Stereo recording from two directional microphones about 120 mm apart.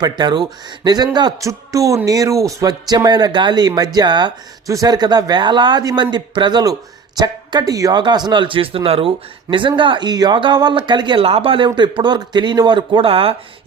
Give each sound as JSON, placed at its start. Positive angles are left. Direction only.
{"t": 0.0, "sound": "speech", "side_deg": -35}
{"t": 11.3, "sound": "speech", "side_deg": -50}